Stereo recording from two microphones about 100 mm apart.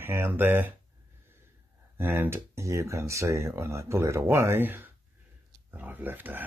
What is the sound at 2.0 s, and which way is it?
Speech, 20° right (ahead or behind).